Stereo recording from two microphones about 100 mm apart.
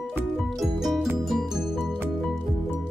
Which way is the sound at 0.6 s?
Centre (ahead or behind).